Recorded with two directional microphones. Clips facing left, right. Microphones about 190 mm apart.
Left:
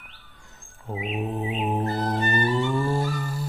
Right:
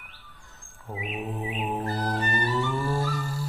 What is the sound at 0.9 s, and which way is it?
Music, 25° left (ahead or behind).